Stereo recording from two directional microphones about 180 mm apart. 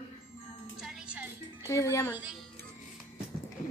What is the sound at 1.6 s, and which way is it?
Speech, 15° left (ahead or behind).